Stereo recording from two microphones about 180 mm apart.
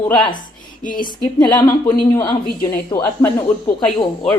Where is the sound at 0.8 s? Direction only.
50° left (ahead or behind).